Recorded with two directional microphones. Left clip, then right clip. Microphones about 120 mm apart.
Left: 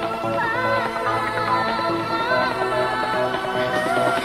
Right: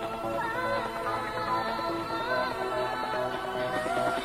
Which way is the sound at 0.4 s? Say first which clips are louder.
Left 9 dB; 35° left (ahead or behind).